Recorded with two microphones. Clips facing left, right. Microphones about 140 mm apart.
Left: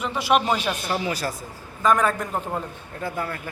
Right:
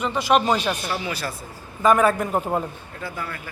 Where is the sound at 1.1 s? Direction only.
40° left (ahead or behind).